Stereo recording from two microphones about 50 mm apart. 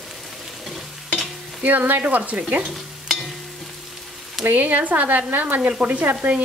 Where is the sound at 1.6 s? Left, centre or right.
Right.